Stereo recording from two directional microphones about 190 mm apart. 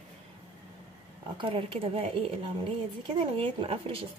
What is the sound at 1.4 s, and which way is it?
A woman's voice, 25° right (ahead or behind).